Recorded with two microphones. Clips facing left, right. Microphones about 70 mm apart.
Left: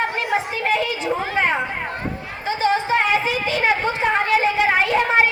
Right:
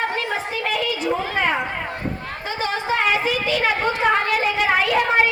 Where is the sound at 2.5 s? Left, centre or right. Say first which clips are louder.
Left 5 dB; left.